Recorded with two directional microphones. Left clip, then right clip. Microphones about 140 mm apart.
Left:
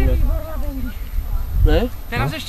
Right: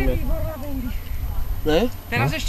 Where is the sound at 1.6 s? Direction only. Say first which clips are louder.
Right 1 dB; 15° right (ahead or behind).